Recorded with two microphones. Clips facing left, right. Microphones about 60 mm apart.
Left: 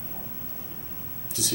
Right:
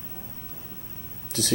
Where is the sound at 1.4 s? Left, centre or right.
Right.